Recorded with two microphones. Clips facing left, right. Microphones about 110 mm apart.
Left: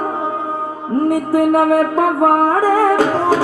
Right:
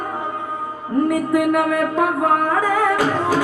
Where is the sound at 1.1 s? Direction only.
30° left (ahead or behind).